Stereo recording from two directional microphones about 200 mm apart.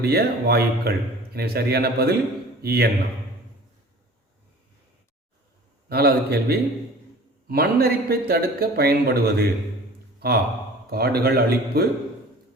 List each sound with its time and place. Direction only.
0.0 s a man's voice: 50° right (ahead or behind)
5.9 s a man's voice: 50° right (ahead or behind)